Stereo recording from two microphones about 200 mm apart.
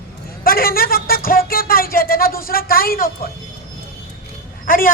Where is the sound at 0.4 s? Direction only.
45° left (ahead or behind).